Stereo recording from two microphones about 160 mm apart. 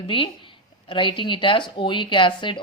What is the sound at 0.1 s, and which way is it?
Speech, 35° left (ahead or behind).